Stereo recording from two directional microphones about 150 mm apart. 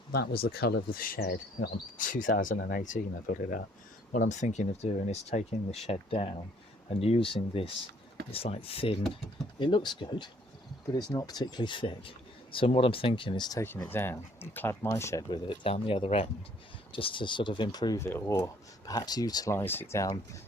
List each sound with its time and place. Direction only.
0.1 s insect: 90° left; by 3.6 s 60° left (ahead or behind)
4.1 s speech: 60° left (ahead or behind); by 13.6 s 30° left (ahead or behind)
13.6 s speech: 15° left (ahead or behind)
15.3 s speech: 35° left (ahead or behind); by 20.1 s 20° left (ahead or behind)